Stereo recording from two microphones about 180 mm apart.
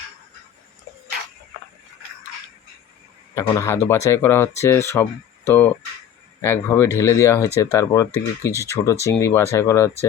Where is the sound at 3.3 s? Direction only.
15° left (ahead or behind).